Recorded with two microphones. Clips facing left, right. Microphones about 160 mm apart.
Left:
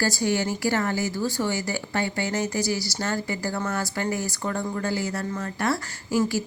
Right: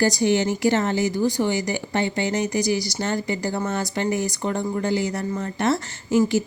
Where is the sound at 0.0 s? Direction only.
20° right (ahead or behind).